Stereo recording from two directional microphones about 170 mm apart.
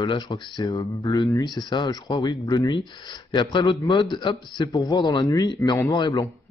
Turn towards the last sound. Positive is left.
turn(degrees=25)  # may be behind; listen again after turning